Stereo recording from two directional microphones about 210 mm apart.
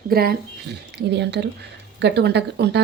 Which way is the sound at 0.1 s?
45° right (ahead or behind).